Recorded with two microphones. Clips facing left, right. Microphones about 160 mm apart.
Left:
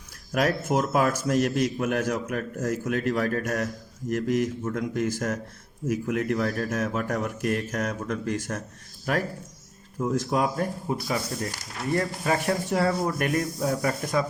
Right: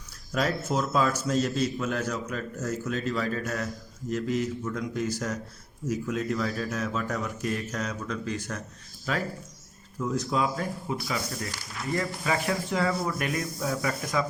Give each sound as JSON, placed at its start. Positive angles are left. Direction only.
{"t": 0.3, "sound": "a man's voice", "side_deg": 55}